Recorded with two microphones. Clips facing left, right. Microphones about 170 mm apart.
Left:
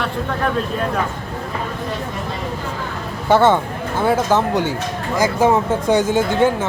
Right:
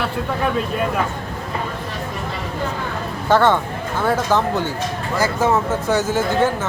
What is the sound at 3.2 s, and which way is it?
Speech, 10° left (ahead or behind).